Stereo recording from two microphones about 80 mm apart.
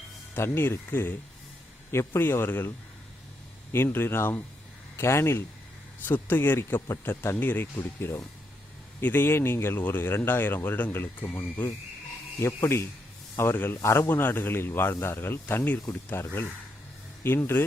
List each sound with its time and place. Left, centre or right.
0.3 s speech: left
3.7 s speech: left
13.7 s speech: left